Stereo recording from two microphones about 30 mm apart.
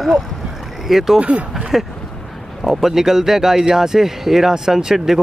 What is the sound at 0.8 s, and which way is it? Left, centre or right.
Speech, centre.